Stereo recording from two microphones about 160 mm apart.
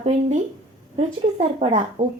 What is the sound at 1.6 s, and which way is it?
Speech, 45° right (ahead or behind).